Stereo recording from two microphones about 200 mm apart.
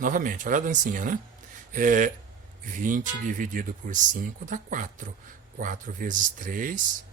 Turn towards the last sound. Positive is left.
turn(degrees=-40)  # may be behind; listen again after turning